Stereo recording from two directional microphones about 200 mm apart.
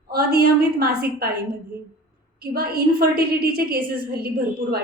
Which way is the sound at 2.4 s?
50° right (ahead or behind).